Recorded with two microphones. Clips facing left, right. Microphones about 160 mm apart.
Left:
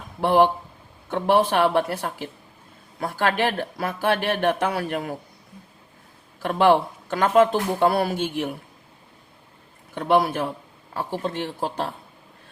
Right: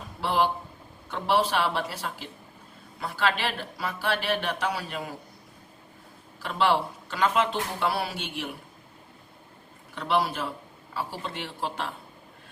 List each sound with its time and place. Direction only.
0.2 s speech: 50° left (ahead or behind)
6.4 s speech: 50° left (ahead or behind)
9.9 s speech: 50° left (ahead or behind)